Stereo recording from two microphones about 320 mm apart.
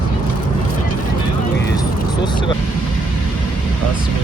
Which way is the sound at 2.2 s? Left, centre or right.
Centre.